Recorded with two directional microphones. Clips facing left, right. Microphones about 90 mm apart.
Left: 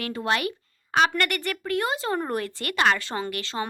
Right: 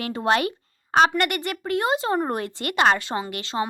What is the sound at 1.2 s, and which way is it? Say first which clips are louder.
Speech: right 2 dB; 20° right (ahead or behind).